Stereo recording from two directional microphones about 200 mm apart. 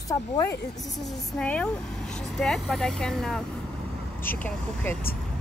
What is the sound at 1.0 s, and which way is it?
Speech, 5° left (ahead or behind).